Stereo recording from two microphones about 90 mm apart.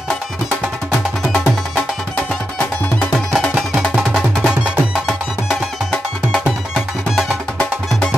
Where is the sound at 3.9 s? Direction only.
5° right (ahead or behind).